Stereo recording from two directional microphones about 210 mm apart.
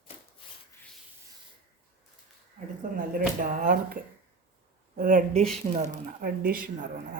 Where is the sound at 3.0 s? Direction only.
40° right (ahead or behind).